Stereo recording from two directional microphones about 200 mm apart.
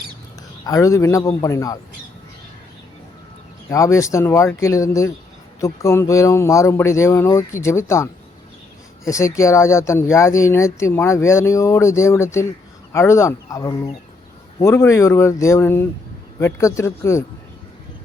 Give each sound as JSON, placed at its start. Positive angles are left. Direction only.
{"t": 0.6, "sound": "speech", "side_deg": 15}
{"t": 3.7, "sound": "speech", "side_deg": 15}